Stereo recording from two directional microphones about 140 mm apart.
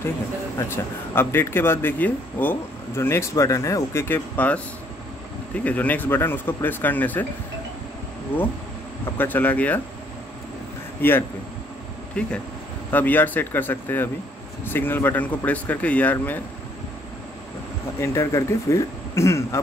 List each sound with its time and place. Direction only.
0.6 s speech: 15° left (ahead or behind)
9.2 s speech: 10° left (ahead or behind)
11.0 s speech: 15° left (ahead or behind)
18.0 s speech: 20° left (ahead or behind)